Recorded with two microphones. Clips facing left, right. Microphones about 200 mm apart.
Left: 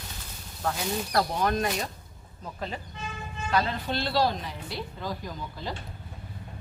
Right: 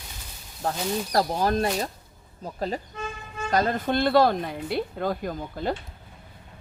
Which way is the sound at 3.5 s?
45° right (ahead or behind).